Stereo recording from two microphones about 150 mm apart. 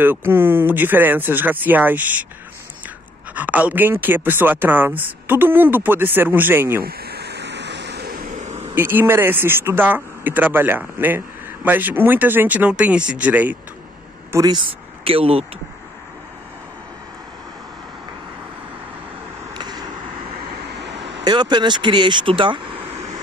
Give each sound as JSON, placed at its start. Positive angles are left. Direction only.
{"t": 0.0, "sound": "speech", "side_deg": -15}
{"t": 3.3, "sound": "speech", "side_deg": -10}
{"t": 6.8, "sound": "a sound", "side_deg": -90}
{"t": 8.0, "sound": "vehicle", "side_deg": -80}
{"t": 8.7, "sound": "speech", "side_deg": -15}
{"t": 14.3, "sound": "speech", "side_deg": -30}
{"t": 19.5, "sound": "vehicle", "side_deg": -30}
{"t": 21.2, "sound": "speech", "side_deg": -30}